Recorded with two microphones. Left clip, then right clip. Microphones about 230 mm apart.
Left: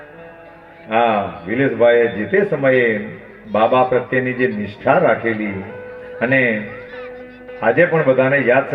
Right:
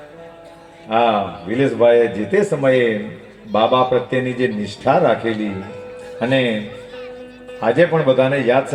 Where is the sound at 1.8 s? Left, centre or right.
Right.